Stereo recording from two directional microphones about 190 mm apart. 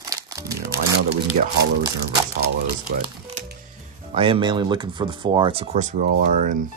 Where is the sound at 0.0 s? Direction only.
20° right (ahead or behind).